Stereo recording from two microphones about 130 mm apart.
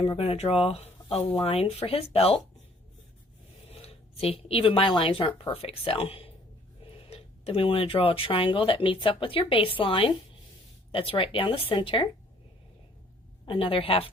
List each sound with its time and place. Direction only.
0.0 s speech: 45° left (ahead or behind)
3.7 s speech: 50° left (ahead or behind)
13.4 s speech: 40° left (ahead or behind)